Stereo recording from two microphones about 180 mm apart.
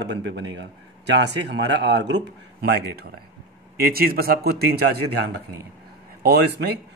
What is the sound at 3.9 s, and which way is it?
A man's voice, 55° right (ahead or behind).